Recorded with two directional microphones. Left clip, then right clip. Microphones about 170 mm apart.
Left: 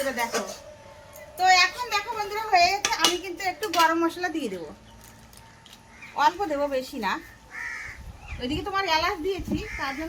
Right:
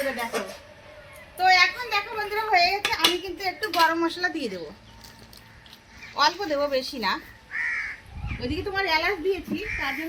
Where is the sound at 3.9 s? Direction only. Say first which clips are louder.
Even; 20° left (ahead or behind).